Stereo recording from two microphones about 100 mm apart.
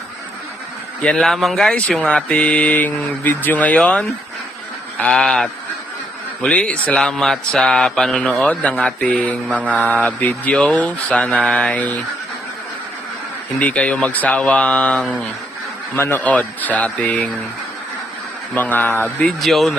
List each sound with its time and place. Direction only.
1.0 s mantra: 5° left (ahead or behind)
4.9 s speech: 10° left (ahead or behind)
6.4 s mantra: 10° left (ahead or behind)
13.6 s mantra: 15° left (ahead or behind)
18.5 s speech: 20° left (ahead or behind)
19.2 s speech: centre (ahead or behind)